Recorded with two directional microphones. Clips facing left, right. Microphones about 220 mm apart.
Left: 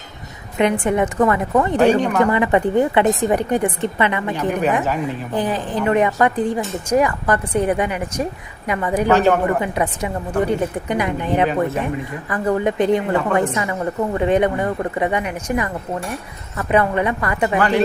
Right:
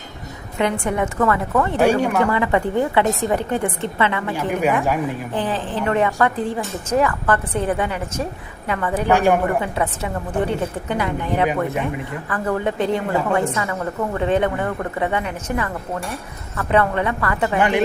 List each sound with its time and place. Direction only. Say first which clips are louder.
0.6 s a woman's voice: left 4 dB; 20° left (ahead or behind)
1.8 s a woman's voice: left 1 dB; 10° right (ahead or behind)
2.3 s a woman's voice: left 3 dB; 20° left (ahead or behind)
4.4 s a woman's voice: even; 10° right (ahead or behind)
5.3 s a woman's voice: left 2 dB; 10° left (ahead or behind)
9.0 s a woman's voice: left 1 dB; 15° right (ahead or behind)
9.6 s a woman's voice: left 1 dB; 15° left (ahead or behind)
17.6 s a woman's voice: left 1 dB; 15° right (ahead or behind)